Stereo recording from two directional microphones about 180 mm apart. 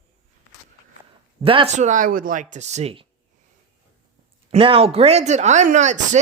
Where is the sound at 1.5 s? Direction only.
35° right (ahead or behind).